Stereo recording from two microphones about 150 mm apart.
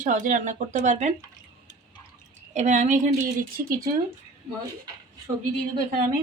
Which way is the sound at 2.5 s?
55° right (ahead or behind).